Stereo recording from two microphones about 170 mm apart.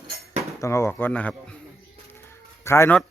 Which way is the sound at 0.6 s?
15° left (ahead or behind).